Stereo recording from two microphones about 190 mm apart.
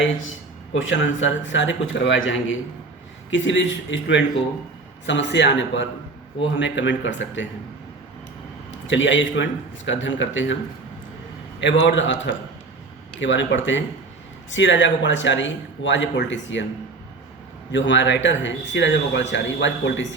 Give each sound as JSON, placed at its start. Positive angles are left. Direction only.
{"t": 0.0, "sound": "speech", "side_deg": 85}
{"t": 8.7, "sound": "speech", "side_deg": 80}
{"t": 11.6, "sound": "speech", "side_deg": 75}
{"t": 17.7, "sound": "speech", "side_deg": 75}